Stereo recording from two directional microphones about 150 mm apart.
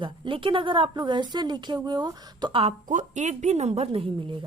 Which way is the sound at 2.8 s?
55° right (ahead or behind).